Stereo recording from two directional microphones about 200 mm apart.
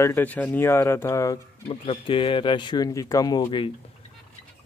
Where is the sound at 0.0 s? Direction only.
10° left (ahead or behind).